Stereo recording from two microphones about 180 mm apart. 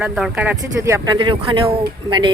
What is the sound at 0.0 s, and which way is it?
Speech, 5° right (ahead or behind).